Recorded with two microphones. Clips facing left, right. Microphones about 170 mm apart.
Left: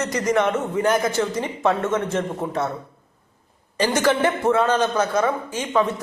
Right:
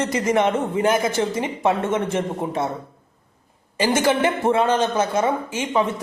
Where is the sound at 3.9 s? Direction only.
25° right (ahead or behind).